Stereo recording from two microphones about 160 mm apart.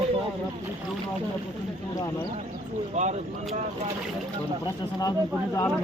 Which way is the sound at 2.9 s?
45° right (ahead or behind).